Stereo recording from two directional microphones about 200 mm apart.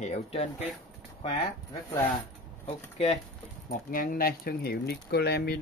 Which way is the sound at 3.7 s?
40° left (ahead or behind).